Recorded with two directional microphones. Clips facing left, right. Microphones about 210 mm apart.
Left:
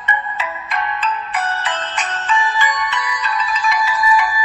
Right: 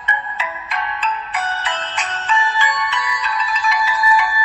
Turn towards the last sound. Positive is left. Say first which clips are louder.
# left 1 dB
turn(degrees=50)  # may be behind; listen again after turning